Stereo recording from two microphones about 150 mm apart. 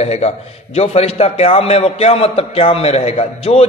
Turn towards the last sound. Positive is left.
turn(degrees=40)  # may be behind; listen again after turning